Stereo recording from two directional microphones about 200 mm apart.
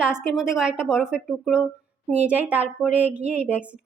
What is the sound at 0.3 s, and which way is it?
A woman's voice, 5° right (ahead or behind).